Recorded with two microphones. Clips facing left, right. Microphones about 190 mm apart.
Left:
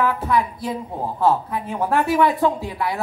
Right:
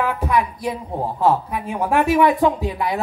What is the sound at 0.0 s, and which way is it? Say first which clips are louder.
Speech: even; 15° right (ahead or behind).